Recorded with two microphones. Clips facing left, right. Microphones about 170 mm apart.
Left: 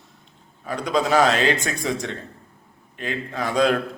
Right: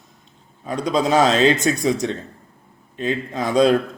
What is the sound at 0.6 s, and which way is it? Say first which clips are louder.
Speech: right 3 dB; 20° right (ahead or behind).